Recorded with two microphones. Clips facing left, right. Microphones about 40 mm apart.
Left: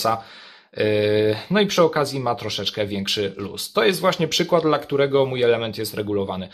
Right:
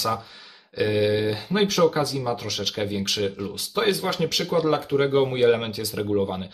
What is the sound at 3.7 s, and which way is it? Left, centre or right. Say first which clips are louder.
Speech: left 5 dB; left.